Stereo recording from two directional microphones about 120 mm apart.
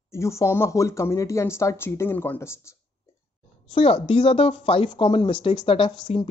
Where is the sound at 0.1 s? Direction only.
25° left (ahead or behind).